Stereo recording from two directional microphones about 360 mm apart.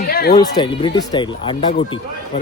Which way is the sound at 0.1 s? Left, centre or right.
Left.